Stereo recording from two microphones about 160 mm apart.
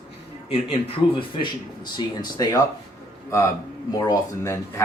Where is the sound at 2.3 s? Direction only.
25° left (ahead or behind).